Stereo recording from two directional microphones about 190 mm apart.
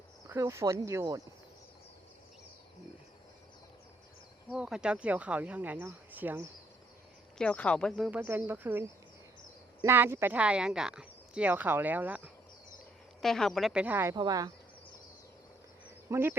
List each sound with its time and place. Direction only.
0.3 s speech: 15° right (ahead or behind)
4.4 s speech: 5° right (ahead or behind)
7.3 s speech: 5° left (ahead or behind); by 12.3 s 10° right (ahead or behind)
13.2 s speech: centre (ahead or behind); by 14.5 s 20° right (ahead or behind)
16.0 s speech: 10° right (ahead or behind)